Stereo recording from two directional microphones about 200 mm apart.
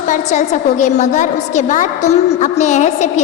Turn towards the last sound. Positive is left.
turn(degrees=35)  # may be behind; listen again after turning